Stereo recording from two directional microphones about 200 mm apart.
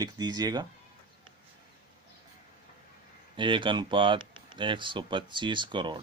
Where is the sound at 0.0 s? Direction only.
20° right (ahead or behind).